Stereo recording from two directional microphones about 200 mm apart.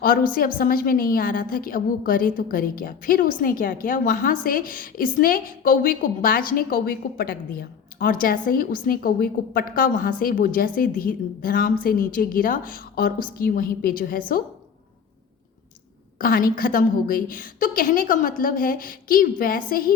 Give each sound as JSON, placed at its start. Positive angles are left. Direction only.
{"t": 0.0, "sound": "a woman's voice", "side_deg": 45}
{"t": 16.1, "sound": "a woman's voice", "side_deg": 45}